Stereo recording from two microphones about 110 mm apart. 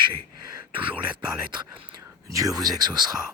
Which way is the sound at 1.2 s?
45° right (ahead or behind).